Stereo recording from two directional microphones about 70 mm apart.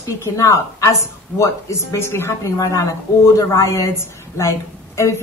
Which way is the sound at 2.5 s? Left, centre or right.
Left.